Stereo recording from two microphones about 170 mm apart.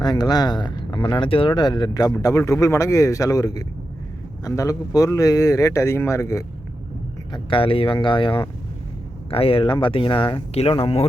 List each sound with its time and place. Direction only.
0.0 s speech: 25° left (ahead or behind)
7.3 s speech: 30° left (ahead or behind)